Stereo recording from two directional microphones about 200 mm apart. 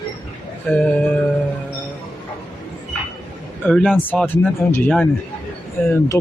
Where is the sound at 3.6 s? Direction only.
5° left (ahead or behind).